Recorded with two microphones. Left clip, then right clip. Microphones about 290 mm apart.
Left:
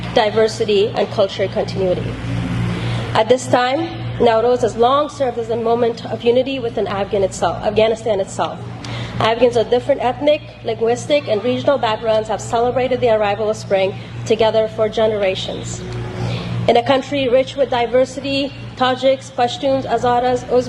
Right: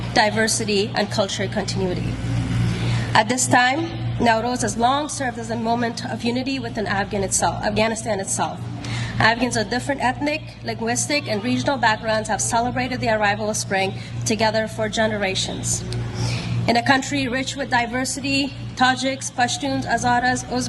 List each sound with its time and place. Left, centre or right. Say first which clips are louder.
0.1 s speech: left 4 dB; right
3.2 s a woman's voice: left 3 dB; right
16.6 s a woman's voice: left 5 dB; right